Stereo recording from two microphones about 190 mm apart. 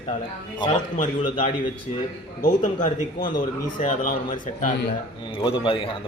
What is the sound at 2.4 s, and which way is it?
A man's voice, 45° left (ahead or behind).